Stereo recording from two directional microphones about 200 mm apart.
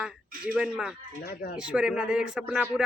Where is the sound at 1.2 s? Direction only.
55° left (ahead or behind).